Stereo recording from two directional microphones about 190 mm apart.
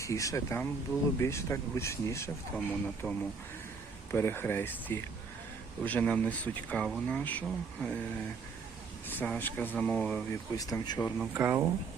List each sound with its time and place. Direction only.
0.0 s speech: 15° left (ahead or behind)
9.0 s speech: 10° left (ahead or behind)
10.5 s speech: 20° left (ahead or behind)
11.2 s speech: 10° right (ahead or behind)